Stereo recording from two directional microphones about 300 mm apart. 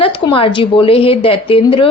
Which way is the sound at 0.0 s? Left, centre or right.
Centre.